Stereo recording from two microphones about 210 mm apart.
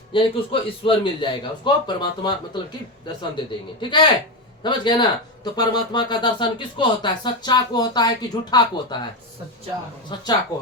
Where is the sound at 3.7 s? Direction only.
20° left (ahead or behind).